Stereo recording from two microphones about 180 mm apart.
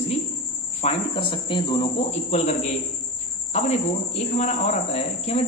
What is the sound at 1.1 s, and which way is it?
Speech, 25° left (ahead or behind).